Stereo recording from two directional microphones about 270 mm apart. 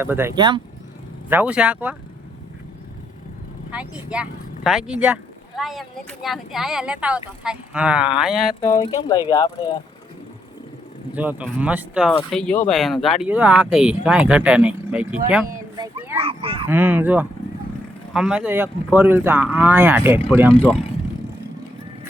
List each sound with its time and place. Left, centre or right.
0.0 s speech: centre
1.3 s speech: centre
3.7 s speech: centre
8.8 s speech: centre
11.1 s speech: centre
15.7 s a sound: centre
16.1 s speech: right
16.6 s speech: centre
20.5 s speech: centre